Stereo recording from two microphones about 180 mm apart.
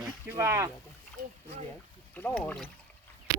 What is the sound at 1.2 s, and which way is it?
Rowboat, 60° right (ahead or behind).